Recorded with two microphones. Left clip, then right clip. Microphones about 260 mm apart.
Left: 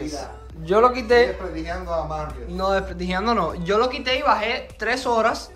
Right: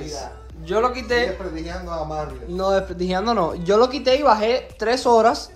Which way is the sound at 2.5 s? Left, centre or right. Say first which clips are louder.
Right 2 dB; centre.